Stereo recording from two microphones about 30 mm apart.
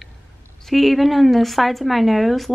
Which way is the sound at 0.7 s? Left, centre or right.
Centre.